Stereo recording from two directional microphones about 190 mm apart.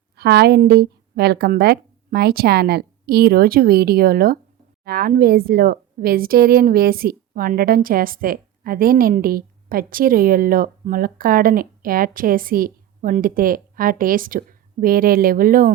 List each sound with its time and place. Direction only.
0.2 s a woman's voice: 60° right (ahead or behind)